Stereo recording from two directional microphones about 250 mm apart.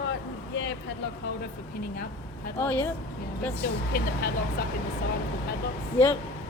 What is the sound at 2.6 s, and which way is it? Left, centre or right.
Speech, centre.